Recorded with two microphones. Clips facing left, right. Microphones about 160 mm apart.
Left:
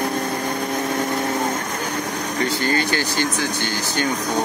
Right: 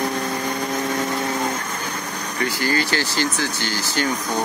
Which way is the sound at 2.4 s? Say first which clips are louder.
Even; 25° left (ahead or behind).